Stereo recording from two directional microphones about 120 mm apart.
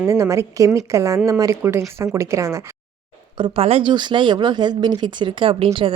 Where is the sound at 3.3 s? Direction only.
45° right (ahead or behind).